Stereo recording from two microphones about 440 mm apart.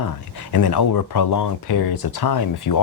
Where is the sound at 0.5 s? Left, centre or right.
Left.